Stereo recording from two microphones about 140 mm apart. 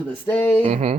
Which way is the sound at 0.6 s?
50° right (ahead or behind).